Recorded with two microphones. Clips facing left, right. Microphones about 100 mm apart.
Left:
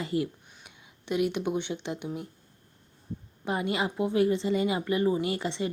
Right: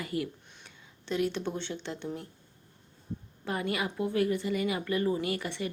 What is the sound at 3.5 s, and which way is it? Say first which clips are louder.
A woman's voice: left 3 dB; 20° left (ahead or behind).